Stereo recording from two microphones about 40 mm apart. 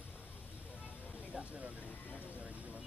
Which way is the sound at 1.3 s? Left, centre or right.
Centre.